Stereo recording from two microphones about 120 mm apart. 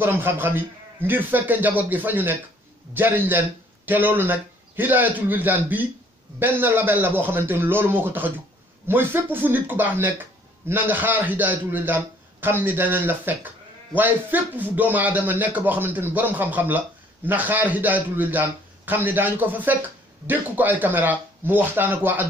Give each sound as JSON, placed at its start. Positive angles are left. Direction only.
{"t": 0.0, "sound": "a man's voice", "side_deg": -20}